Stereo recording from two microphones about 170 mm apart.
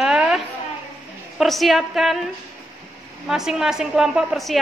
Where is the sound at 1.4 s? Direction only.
Centre (ahead or behind).